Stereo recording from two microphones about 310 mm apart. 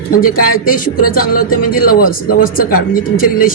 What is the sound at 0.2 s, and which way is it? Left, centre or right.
Speech, left.